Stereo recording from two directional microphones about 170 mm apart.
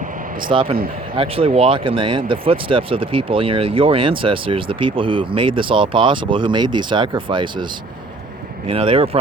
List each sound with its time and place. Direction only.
0.5 s speech: 30° right (ahead or behind)